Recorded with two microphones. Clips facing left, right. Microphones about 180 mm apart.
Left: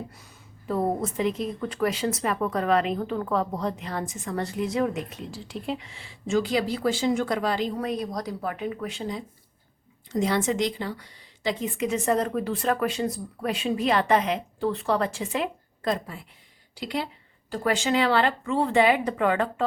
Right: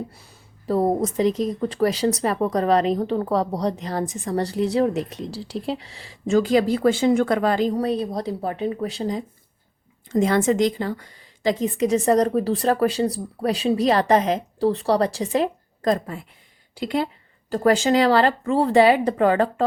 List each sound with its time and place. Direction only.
0.7 s a woman's voice: 40° right (ahead or behind)